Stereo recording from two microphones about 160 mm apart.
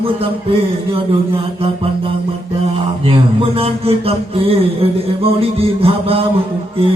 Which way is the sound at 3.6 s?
35° right (ahead or behind).